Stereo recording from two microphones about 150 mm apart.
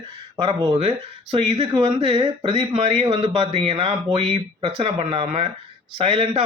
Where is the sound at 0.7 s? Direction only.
40° right (ahead or behind).